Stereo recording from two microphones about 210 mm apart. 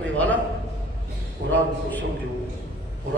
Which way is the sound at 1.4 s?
55° right (ahead or behind).